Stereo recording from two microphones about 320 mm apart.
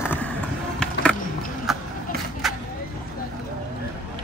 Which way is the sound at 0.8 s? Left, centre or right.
Centre.